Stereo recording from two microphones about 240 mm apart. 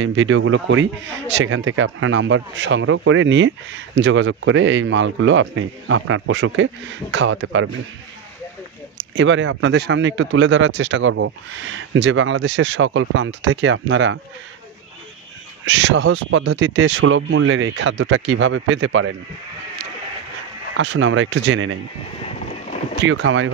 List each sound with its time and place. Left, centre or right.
0.0 s a man's voice: right
9.1 s a man's voice: right
15.6 s a man's voice: right
20.7 s a man's voice: right
22.9 s a man's voice: right